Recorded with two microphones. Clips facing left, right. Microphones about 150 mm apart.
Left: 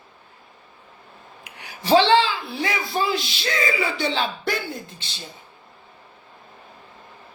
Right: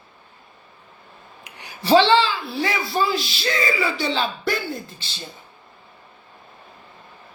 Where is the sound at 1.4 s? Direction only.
10° left (ahead or behind).